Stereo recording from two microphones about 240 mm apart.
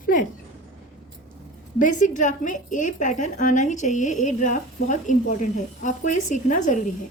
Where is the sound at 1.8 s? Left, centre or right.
Left.